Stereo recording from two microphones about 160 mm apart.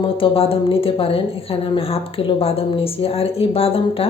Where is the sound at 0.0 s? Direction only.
35° left (ahead or behind).